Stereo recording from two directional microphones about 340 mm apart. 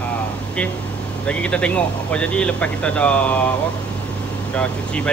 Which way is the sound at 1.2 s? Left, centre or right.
Centre.